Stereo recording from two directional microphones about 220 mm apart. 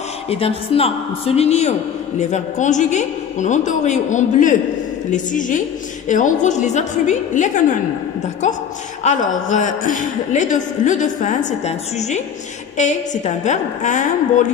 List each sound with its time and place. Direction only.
0.3 s a man's voice: 25° left (ahead or behind)
9.0 s a man's voice: 35° left (ahead or behind)